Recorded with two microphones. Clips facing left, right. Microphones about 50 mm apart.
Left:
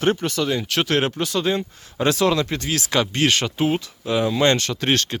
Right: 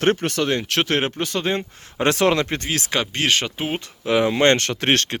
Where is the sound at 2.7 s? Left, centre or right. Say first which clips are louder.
Left 2 dB; right.